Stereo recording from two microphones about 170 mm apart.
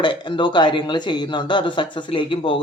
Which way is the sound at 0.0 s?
25° left (ahead or behind).